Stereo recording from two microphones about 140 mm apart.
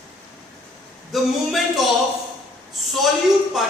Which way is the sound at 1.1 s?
Centre (ahead or behind).